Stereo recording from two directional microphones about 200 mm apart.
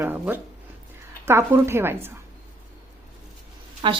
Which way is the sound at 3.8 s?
25° right (ahead or behind).